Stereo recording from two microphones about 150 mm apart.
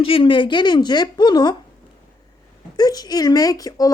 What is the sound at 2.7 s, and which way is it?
A woman's voice, 25° left (ahead or behind).